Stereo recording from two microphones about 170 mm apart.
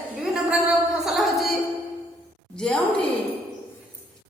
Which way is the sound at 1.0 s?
Centre (ahead or behind).